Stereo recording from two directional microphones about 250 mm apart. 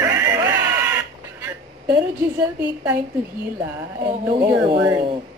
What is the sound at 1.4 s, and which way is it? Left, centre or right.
A woman's voice, centre.